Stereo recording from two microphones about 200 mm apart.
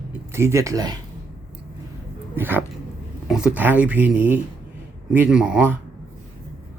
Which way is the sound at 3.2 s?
5° right (ahead or behind).